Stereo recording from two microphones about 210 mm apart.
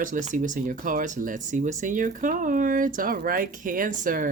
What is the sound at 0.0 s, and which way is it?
Speech, 35° right (ahead or behind).